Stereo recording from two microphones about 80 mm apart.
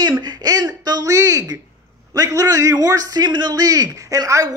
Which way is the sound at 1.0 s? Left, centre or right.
Right.